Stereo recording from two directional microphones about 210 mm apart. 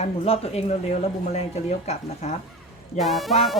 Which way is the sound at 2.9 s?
Centre (ahead or behind).